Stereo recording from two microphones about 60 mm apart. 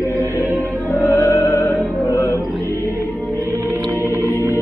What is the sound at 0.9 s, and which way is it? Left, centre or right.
Opera, left.